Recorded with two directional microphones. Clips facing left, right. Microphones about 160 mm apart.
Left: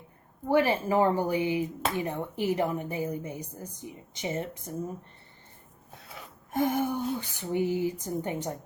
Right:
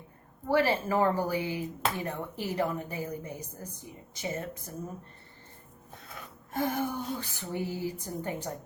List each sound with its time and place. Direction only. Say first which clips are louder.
0.4 s speech: left 2 dB; 15° left (ahead or behind)
6.5 s speech: left 4 dB; 20° left (ahead or behind)